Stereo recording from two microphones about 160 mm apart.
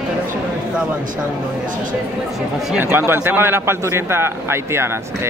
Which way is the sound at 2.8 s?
15° right (ahead or behind).